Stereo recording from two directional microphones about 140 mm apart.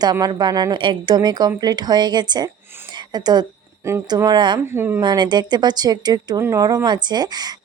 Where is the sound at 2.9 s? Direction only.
30° right (ahead or behind).